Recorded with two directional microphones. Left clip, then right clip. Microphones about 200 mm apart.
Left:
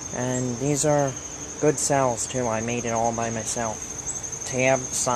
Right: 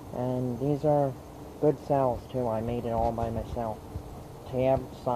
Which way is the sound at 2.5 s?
45° left (ahead or behind).